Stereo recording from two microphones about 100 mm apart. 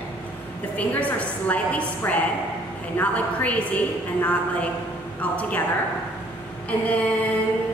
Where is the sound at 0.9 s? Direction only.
15° left (ahead or behind).